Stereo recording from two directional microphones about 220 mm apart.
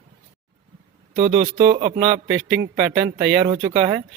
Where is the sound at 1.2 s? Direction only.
30° right (ahead or behind).